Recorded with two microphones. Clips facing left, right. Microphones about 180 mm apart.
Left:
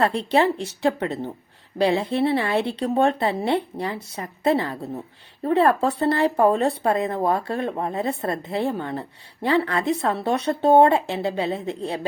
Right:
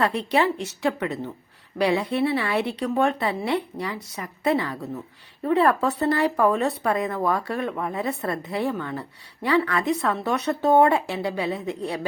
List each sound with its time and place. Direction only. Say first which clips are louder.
0.0 s speech: left 2 dB; 30° left (ahead or behind)